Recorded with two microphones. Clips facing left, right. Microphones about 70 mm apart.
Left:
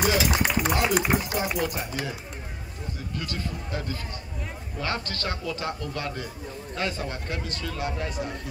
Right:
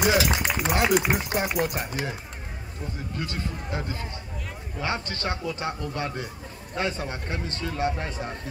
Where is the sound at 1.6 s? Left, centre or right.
Right.